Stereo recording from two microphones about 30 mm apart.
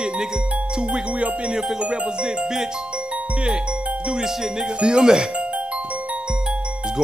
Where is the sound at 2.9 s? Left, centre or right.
Right.